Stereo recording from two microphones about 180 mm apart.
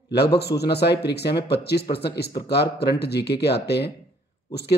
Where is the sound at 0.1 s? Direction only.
65° left (ahead or behind).